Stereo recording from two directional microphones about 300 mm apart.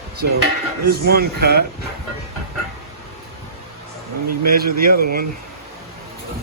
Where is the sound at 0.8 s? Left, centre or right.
Right.